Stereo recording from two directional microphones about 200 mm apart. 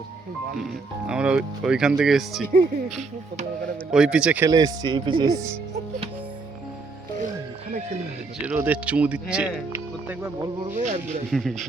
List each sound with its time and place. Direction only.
0.6 s speech: 5° right (ahead or behind)
3.9 s speech: 5° right (ahead or behind)
4.4 s speech: 20° right (ahead or behind)
8.4 s speech: 10° right (ahead or behind)
10.8 s speech: 35° right (ahead or behind)
11.3 s speech: centre (ahead or behind)